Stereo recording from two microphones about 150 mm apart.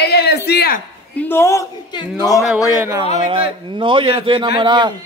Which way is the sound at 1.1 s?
15° left (ahead or behind).